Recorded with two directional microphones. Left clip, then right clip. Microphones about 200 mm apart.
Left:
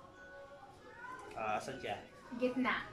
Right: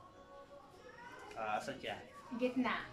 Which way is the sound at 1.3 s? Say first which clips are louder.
Left 1 dB; centre (ahead or behind).